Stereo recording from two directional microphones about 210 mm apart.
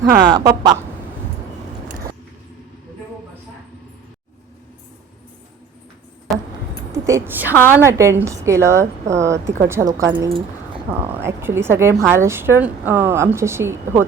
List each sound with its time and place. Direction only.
0.0 s speech: 20° right (ahead or behind)
6.3 s keys jangling: centre (ahead or behind)
7.0 s a woman's voice: 10° right (ahead or behind)